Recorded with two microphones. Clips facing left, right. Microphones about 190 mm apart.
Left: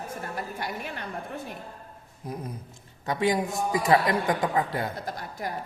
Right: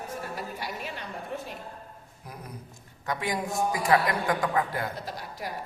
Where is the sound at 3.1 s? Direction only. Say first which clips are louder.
Left 5 dB; 25° left (ahead or behind).